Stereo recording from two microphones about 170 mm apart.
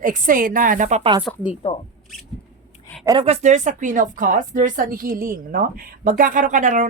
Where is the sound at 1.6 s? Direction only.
35° left (ahead or behind).